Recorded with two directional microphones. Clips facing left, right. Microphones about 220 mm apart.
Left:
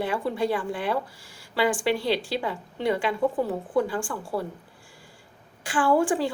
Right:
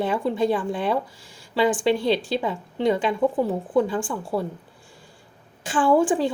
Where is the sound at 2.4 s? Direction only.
20° right (ahead or behind).